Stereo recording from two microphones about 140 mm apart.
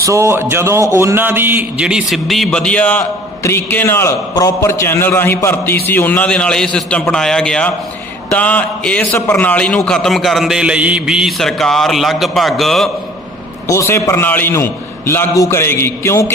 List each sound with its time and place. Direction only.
0.0 s a man's voice: 20° right (ahead or behind); by 12.9 s centre (ahead or behind)
13.7 s a man's voice: 20° left (ahead or behind)